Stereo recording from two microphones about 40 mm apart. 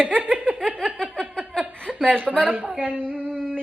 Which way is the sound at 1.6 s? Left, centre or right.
Right.